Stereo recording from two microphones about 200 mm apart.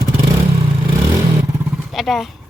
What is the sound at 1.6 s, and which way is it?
Vehicle, 5° right (ahead or behind).